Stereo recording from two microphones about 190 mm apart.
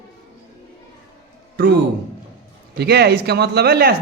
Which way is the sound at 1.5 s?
60° right (ahead or behind).